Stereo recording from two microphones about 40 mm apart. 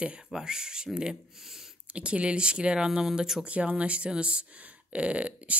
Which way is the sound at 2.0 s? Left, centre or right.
Right.